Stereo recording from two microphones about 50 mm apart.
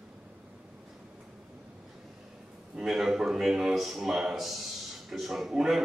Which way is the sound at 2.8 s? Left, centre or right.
Centre.